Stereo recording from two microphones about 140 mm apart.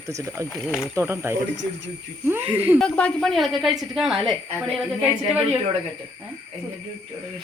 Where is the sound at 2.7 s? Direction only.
5° left (ahead or behind).